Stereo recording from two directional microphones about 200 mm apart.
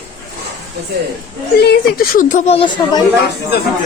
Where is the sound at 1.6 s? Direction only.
45° left (ahead or behind); by 3.0 s 25° left (ahead or behind).